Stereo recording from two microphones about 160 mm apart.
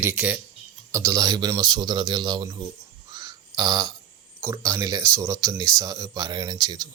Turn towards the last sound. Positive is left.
turn(degrees=-25)  # may be behind; listen again after turning